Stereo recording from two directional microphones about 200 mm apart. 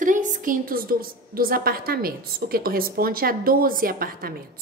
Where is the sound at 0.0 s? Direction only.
40° right (ahead or behind).